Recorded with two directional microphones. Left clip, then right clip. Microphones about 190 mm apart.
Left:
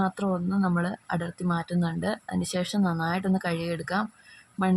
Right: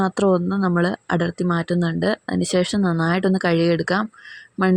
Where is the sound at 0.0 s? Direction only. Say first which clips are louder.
Right 10 dB; 30° right (ahead or behind).